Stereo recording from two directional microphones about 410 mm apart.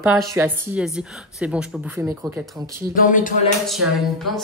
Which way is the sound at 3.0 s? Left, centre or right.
Centre.